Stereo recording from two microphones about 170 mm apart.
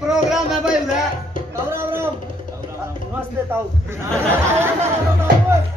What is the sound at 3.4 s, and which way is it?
Speech, 15° right (ahead or behind).